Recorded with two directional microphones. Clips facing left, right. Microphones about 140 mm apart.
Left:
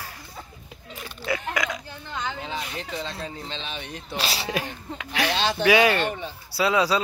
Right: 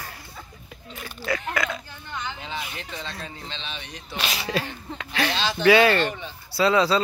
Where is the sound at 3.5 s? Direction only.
45° left (ahead or behind).